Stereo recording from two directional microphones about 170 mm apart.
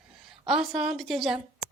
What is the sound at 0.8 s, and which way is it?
Speech, 5° right (ahead or behind).